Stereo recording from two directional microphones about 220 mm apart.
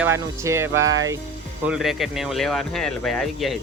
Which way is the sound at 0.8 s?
60° right (ahead or behind).